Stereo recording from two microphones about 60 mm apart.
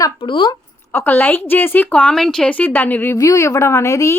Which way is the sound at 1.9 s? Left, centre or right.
Left.